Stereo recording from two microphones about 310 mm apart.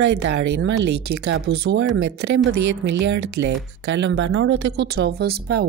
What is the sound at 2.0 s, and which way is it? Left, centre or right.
A woman's voice, right.